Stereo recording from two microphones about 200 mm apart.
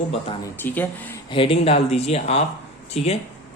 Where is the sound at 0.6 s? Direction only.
10° left (ahead or behind).